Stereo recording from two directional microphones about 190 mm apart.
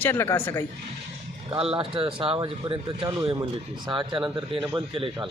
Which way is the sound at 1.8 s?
25° right (ahead or behind).